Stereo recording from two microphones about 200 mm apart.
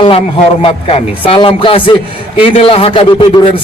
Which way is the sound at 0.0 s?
25° left (ahead or behind).